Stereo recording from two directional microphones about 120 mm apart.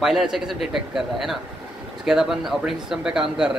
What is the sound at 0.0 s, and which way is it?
Speech, 5° right (ahead or behind).